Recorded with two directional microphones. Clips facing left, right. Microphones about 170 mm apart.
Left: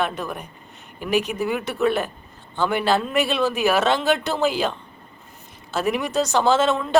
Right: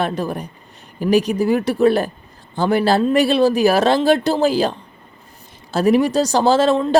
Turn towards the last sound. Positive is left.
turn(degrees=-30)  # may be behind; listen again after turning